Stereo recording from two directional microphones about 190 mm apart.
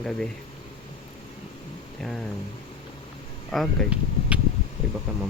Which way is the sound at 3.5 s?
Centre (ahead or behind).